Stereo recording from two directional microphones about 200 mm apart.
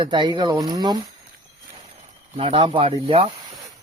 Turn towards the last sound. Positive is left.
turn(degrees=-30)  # may be behind; listen again after turning